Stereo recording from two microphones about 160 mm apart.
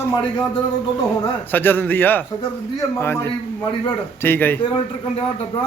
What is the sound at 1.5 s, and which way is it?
Speech, 10° left (ahead or behind).